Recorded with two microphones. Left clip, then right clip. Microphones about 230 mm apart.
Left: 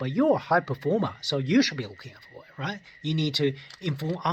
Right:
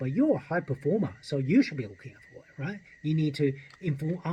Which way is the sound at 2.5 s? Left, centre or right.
Left.